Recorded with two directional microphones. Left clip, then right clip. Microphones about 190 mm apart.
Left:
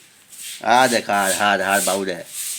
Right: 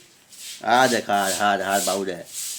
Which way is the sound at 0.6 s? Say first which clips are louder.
Left 3 dB; 25° left (ahead or behind).